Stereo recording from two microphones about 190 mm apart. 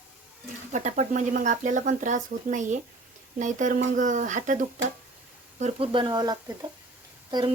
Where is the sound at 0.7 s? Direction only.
40° right (ahead or behind).